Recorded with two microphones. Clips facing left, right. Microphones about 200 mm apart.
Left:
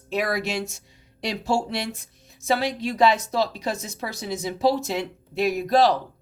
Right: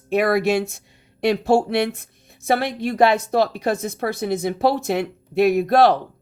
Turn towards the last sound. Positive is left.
turn(degrees=-60)  # may be behind; listen again after turning